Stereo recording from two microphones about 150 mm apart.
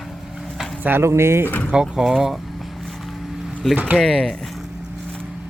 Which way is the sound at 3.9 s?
5° left (ahead or behind).